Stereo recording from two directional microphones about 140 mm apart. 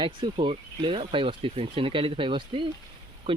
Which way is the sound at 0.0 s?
35° right (ahead or behind).